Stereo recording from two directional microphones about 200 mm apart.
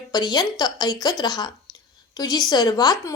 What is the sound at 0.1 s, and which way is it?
Speech, 20° left (ahead or behind).